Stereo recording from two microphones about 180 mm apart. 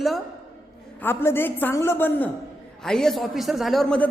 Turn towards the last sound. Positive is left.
turn(degrees=5)  # may be behind; listen again after turning